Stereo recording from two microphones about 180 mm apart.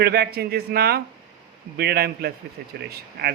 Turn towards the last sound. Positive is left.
turn(degrees=-65)  # may be behind; listen again after turning